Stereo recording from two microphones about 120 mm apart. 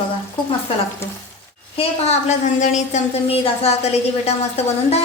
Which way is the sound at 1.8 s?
70° left (ahead or behind).